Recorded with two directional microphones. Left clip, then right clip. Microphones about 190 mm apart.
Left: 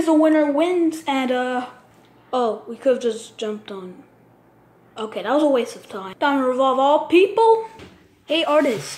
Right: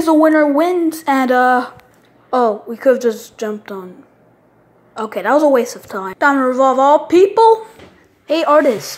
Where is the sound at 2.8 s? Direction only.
15° right (ahead or behind).